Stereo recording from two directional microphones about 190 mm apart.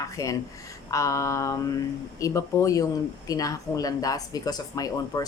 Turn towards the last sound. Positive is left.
turn(degrees=20)  # may be behind; listen again after turning